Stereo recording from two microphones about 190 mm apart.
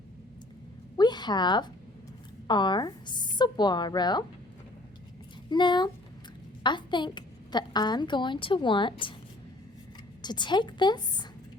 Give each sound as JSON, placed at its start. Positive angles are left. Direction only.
{"t": 0.9, "sound": "a sound", "side_deg": 20}
{"t": 2.5, "sound": "a woman's voice", "side_deg": 25}
{"t": 5.5, "sound": "a woman's voice", "side_deg": 25}
{"t": 10.2, "sound": "a woman's voice", "side_deg": 25}